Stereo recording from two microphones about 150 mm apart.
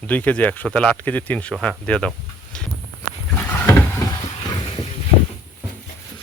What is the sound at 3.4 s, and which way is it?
Vehicle, 15° left (ahead or behind).